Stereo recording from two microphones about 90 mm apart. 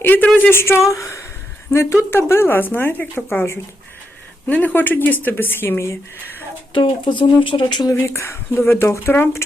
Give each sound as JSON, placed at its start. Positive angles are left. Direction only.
{"t": 0.0, "sound": "speech", "side_deg": 20}
{"t": 6.7, "sound": "speech", "side_deg": 65}
{"t": 7.9, "sound": "speech", "side_deg": 30}